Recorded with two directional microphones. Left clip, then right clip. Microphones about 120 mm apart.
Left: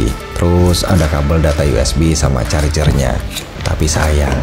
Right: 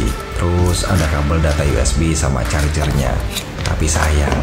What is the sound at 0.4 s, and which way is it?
Speech, 70° left (ahead or behind).